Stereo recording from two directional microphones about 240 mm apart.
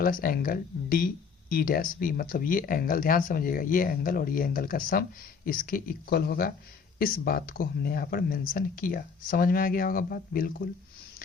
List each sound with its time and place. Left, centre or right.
0.0 s speech: left